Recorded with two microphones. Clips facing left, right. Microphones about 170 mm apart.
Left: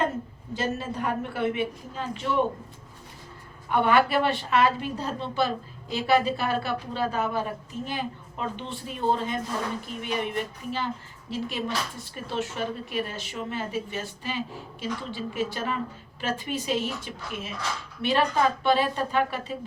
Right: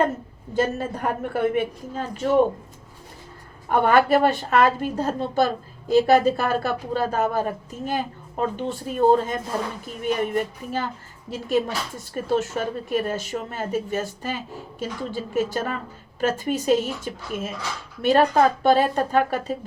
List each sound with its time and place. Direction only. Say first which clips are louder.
0.5 s speech: right 6 dB; 50° right (ahead or behind)
3.7 s speech: right 4 dB; 45° right (ahead or behind)